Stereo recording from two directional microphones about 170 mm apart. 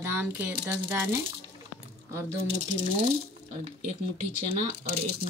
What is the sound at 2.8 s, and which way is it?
Speech, 30° right (ahead or behind).